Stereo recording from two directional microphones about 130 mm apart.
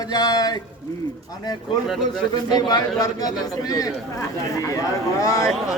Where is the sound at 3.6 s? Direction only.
25° left (ahead or behind).